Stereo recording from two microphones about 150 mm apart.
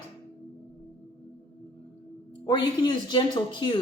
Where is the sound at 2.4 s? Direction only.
30° left (ahead or behind).